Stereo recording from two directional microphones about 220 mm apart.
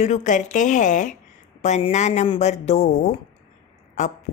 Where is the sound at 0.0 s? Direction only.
35° left (ahead or behind).